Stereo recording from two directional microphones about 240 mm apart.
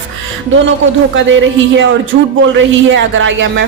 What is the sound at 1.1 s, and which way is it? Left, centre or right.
Speech, right.